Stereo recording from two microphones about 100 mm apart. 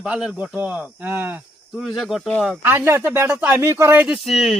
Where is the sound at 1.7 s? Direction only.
Centre (ahead or behind).